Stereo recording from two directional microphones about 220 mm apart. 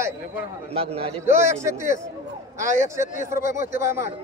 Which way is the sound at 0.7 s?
25° right (ahead or behind).